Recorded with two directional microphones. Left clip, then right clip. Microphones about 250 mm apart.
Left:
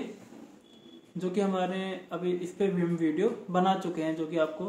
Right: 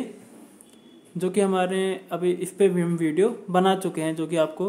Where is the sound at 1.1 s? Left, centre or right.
Right.